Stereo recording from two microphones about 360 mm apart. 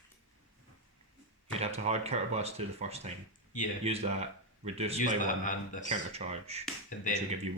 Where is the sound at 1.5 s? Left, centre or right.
Centre.